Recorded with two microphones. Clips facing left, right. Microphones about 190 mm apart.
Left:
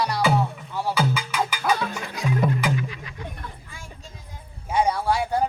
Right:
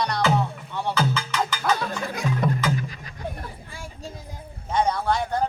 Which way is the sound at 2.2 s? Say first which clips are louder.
Left 2 dB; 55° right (ahead or behind).